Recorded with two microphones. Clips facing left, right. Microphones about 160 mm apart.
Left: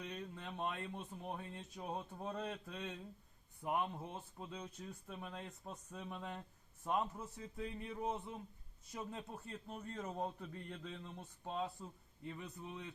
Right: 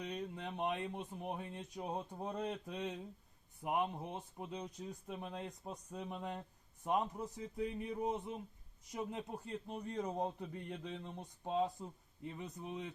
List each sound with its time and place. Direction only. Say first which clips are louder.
0.0 s speech: right 4 dB; 15° right (ahead or behind)